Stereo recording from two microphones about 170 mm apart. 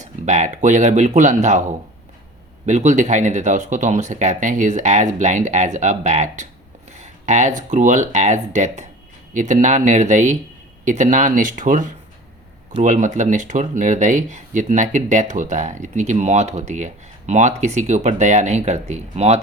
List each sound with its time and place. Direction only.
0.0 s speech: 45° right (ahead or behind)